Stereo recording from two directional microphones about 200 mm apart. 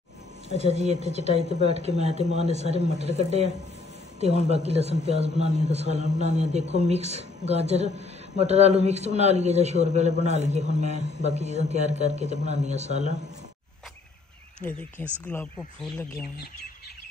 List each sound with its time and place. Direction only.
0.6 s a man's voice: 35° right (ahead or behind)
14.6 s speech: 10° left (ahead or behind)